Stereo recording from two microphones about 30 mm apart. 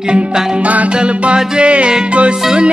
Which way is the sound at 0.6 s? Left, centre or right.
Right.